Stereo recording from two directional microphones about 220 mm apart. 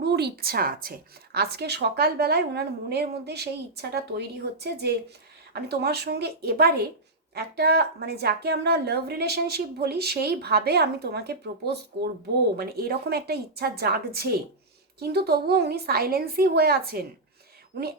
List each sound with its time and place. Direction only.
0.0 s a woman's voice: 50° right (ahead or behind)